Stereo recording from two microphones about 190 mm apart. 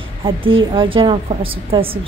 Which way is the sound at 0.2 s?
30° right (ahead or behind).